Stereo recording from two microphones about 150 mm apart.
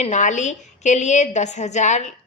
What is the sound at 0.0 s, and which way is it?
A woman's voice, 55° left (ahead or behind).